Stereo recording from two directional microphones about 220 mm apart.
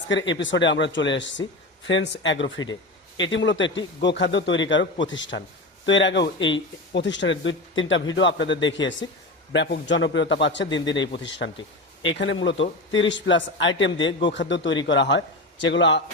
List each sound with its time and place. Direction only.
0.1 s a man's voice: 55° left (ahead or behind)